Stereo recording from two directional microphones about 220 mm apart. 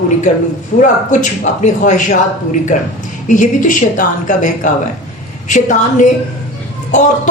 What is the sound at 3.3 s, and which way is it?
A woman's voice, 35° left (ahead or behind).